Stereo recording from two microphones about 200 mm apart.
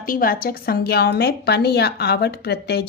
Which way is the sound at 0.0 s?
45° left (ahead or behind).